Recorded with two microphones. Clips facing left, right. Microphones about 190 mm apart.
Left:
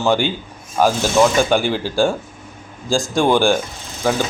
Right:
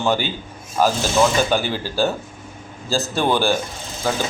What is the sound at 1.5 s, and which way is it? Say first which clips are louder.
Speech: left 4 dB; 15° left (ahead or behind).